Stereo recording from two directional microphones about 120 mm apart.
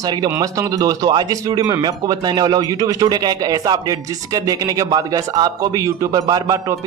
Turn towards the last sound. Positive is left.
turn(degrees=-30)  # may be behind; listen again after turning